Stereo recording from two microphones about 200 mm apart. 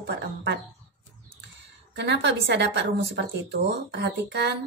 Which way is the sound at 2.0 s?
60° right (ahead or behind).